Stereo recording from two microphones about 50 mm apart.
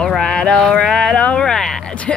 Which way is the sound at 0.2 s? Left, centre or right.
Centre.